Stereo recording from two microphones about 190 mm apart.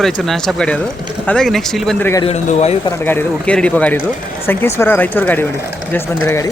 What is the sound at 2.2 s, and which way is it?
Speech, 35° left (ahead or behind).